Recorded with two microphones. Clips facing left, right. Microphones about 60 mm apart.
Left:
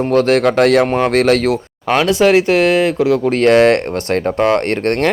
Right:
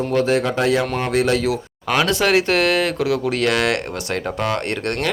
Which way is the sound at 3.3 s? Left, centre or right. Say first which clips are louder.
Left 12 dB; left.